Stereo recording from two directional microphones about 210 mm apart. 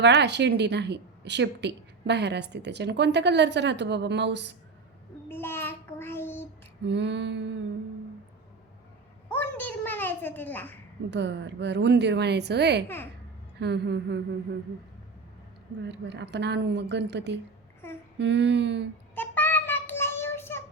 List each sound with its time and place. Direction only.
0.0 s a woman's voice: 55° right (ahead or behind)
5.3 s child singing: 10° left (ahead or behind)
6.8 s a woman's voice: 55° right (ahead or behind)
9.3 s a sound: 10° left (ahead or behind)
11.1 s a woman's voice: 55° right (ahead or behind)
13.6 s a sound: 55° right (ahead or behind)
15.8 s a woman's voice: 55° right (ahead or behind)
19.1 s child singing: 10° left (ahead or behind)